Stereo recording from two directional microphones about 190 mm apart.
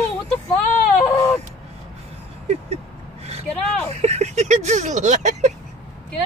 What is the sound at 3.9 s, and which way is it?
Speech, 35° right (ahead or behind).